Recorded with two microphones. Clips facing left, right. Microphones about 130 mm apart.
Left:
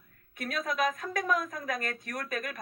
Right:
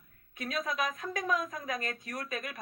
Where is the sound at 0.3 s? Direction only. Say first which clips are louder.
Left 2 dB; 50° left (ahead or behind).